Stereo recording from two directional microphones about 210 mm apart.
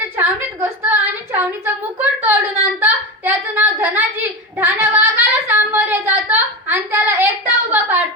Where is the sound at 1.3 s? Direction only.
10° right (ahead or behind).